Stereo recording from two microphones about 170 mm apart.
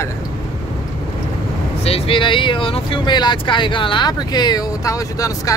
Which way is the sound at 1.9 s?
35° left (ahead or behind).